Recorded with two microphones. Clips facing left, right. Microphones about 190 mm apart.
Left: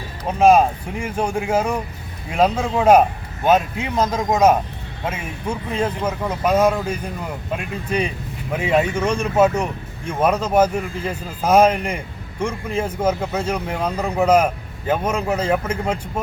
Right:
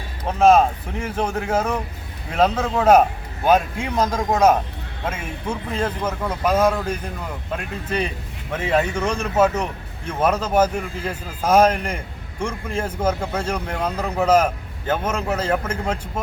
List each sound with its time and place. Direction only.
0.3 s a man's voice: 10° left (ahead or behind)